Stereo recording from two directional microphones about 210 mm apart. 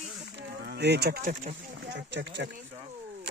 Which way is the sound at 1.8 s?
55° right (ahead or behind).